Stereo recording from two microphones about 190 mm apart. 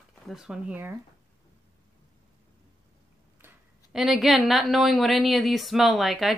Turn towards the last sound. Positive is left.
turn(degrees=0)  # may be behind; listen again after turning